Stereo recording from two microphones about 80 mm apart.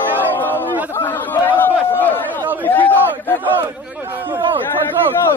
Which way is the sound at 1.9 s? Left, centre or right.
Left.